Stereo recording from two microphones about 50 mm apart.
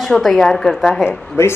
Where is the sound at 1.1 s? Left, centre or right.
Left.